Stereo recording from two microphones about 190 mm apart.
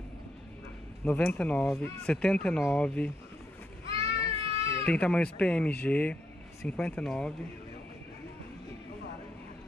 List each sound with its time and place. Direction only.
1.0 s speech: 10° left (ahead or behind)
3.9 s a sound: 30° right (ahead or behind)
4.8 s speech: 5° left (ahead or behind)